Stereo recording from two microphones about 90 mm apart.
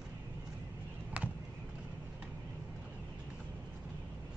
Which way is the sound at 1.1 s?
15° right (ahead or behind).